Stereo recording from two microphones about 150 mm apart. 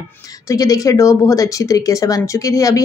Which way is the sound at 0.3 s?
25° left (ahead or behind).